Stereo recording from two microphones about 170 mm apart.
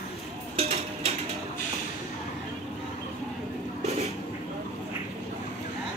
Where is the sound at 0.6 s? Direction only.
35° right (ahead or behind).